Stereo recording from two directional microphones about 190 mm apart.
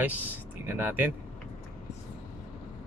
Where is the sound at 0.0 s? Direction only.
10° right (ahead or behind).